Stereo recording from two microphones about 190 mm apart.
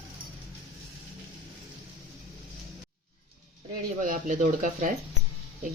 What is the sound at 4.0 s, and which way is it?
Speech, 40° right (ahead or behind).